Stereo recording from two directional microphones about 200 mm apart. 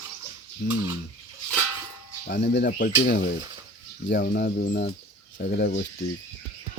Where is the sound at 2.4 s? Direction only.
60° left (ahead or behind).